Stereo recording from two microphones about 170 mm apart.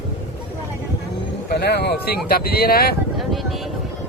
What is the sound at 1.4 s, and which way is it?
Speech, 75° left (ahead or behind).